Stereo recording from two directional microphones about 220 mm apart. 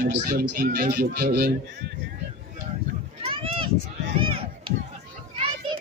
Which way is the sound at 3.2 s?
25° right (ahead or behind).